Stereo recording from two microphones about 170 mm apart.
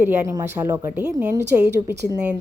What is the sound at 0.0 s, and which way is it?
A woman's voice, 10° right (ahead or behind).